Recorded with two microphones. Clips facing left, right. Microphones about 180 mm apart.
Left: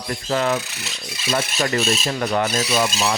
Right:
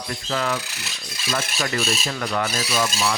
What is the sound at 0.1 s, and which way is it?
Filing, 35° left (ahead or behind).